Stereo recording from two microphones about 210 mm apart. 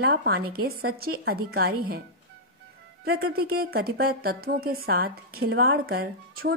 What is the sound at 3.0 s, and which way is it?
Speech, 45° right (ahead or behind).